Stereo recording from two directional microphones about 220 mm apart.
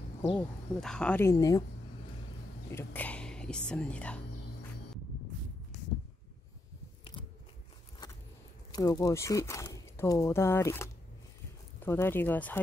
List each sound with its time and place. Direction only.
0.4 s speech: 5° left (ahead or behind)
2.7 s speech: 10° left (ahead or behind)
8.7 s speech: 15° left (ahead or behind)